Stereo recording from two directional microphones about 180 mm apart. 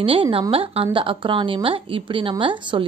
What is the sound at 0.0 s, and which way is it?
A woman's voice, 30° right (ahead or behind).